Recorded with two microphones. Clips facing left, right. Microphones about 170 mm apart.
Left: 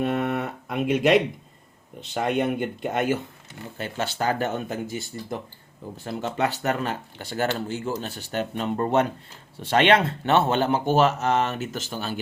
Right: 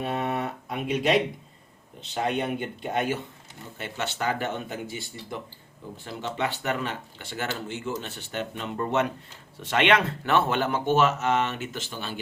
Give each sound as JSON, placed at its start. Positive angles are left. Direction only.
{"t": 0.2, "sound": "a sound", "side_deg": 55}
{"t": 2.1, "sound": "speech", "side_deg": 55}
{"t": 3.8, "sound": "speech", "side_deg": 35}